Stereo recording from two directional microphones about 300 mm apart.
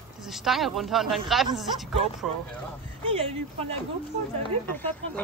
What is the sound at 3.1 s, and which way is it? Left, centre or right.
Speech, centre.